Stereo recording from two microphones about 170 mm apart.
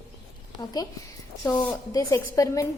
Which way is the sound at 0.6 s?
20° left (ahead or behind).